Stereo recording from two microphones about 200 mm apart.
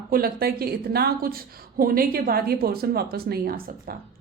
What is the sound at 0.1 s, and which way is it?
A woman's voice, 50° right (ahead or behind).